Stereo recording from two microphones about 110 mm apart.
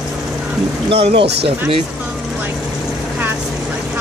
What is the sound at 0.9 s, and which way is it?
Speech, 60° right (ahead or behind).